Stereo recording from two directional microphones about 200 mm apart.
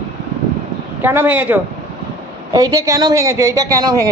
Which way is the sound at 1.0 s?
10° right (ahead or behind).